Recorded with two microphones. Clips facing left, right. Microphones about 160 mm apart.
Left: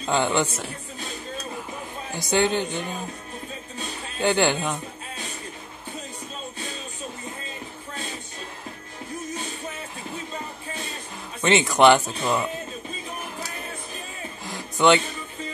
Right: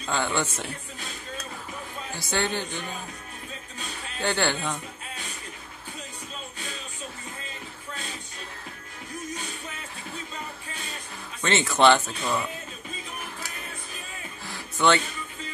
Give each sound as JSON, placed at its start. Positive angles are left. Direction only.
{"t": 0.0, "sound": "speech", "side_deg": 20}
{"t": 2.1, "sound": "speech", "side_deg": 20}
{"t": 4.2, "sound": "speech", "side_deg": 15}
{"t": 11.4, "sound": "speech", "side_deg": 15}
{"t": 14.4, "sound": "a sound", "side_deg": 15}